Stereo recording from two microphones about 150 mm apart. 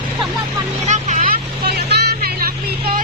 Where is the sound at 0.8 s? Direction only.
50° right (ahead or behind).